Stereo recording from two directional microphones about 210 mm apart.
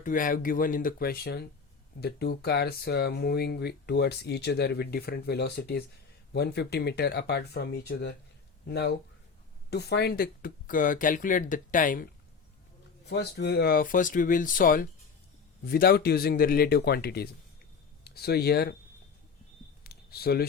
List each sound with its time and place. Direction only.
0.0 s speech: 40° left (ahead or behind)
13.1 s speech: 50° left (ahead or behind)
19.8 s a sound: 45° left (ahead or behind)